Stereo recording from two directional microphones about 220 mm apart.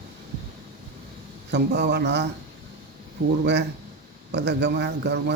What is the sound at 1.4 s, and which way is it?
Speech, 50° right (ahead or behind).